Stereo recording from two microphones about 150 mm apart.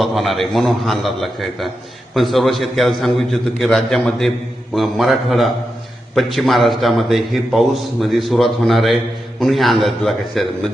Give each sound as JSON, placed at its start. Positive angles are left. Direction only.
{"t": 0.0, "sound": "a man's voice", "side_deg": 0}